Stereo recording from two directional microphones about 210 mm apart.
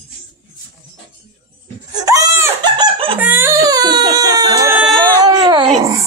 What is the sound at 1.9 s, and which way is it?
Wail, 15° right (ahead or behind).